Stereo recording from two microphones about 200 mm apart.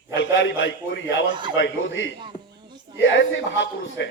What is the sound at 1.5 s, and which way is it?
A man's voice, 65° left (ahead or behind).